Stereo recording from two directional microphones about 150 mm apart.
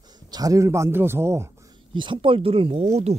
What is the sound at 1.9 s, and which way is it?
Speech, 35° right (ahead or behind).